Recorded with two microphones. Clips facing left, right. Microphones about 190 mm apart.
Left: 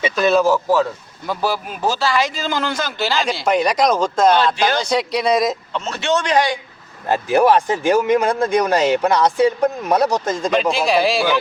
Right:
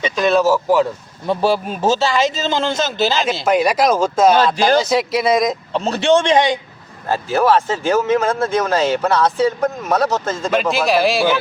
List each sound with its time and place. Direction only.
0.0 s speech: centre (ahead or behind)
1.3 s speech: 25° right (ahead or behind)
3.4 s speech: 5° right (ahead or behind)
4.4 s speech: 40° right (ahead or behind)
4.8 s speech: 5° right (ahead or behind)
5.7 s speech: 35° right (ahead or behind)
7.1 s speech: 15° left (ahead or behind)
10.5 s speech: centre (ahead or behind)